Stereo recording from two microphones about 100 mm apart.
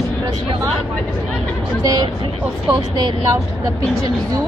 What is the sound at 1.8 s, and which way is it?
Speech, 45° right (ahead or behind).